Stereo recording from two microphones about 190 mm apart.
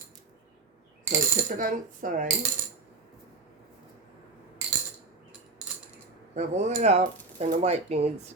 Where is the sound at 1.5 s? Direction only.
45° right (ahead or behind).